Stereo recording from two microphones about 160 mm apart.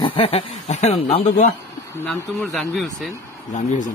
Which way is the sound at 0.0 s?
35° left (ahead or behind).